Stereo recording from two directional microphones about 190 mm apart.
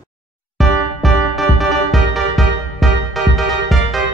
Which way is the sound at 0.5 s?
Centre (ahead or behind).